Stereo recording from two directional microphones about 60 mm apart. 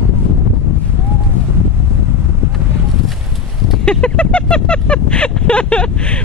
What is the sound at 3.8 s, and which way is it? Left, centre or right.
Speech, centre.